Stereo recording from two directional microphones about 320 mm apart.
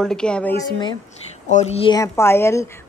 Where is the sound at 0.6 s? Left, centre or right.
Centre.